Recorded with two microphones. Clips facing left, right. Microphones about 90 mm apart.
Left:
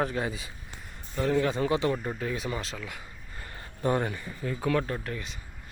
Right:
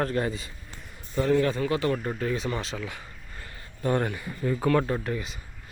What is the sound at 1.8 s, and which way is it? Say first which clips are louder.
A man's voice: right 2 dB; 5° left (ahead or behind).